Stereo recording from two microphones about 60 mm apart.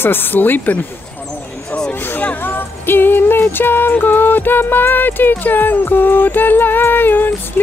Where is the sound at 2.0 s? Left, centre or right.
Left.